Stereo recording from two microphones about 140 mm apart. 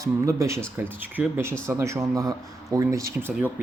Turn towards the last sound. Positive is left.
turn(degrees=-15)  # may be behind; listen again after turning